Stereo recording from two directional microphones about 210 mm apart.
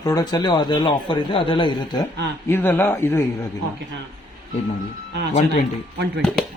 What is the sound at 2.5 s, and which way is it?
Speech, 10° left (ahead or behind).